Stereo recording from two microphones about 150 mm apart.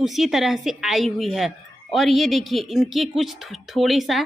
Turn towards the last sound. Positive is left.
turn(degrees=0)  # may be behind; listen again after turning